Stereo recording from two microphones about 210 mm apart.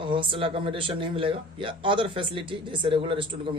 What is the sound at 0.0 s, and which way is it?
Speech, 25° right (ahead or behind).